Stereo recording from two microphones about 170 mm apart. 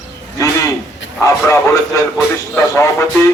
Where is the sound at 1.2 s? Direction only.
20° left (ahead or behind).